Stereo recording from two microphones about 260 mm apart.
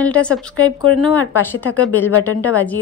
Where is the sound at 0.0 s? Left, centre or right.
Centre.